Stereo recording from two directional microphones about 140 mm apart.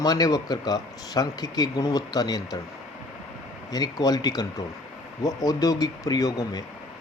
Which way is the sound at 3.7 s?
30° left (ahead or behind).